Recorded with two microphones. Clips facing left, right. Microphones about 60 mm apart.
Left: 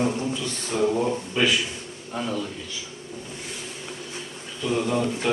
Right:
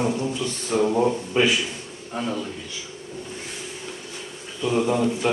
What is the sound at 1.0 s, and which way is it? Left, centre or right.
Speech, centre.